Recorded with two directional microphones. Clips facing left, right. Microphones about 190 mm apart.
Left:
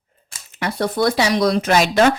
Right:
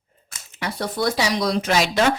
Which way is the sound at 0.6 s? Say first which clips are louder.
Left 5 dB; 60° left (ahead or behind).